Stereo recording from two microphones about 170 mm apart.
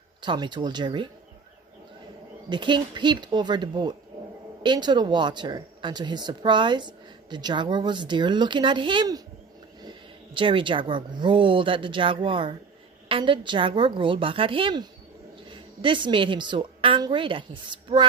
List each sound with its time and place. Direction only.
0.2 s speech: 25° right (ahead or behind)
2.5 s speech: 25° right (ahead or behind)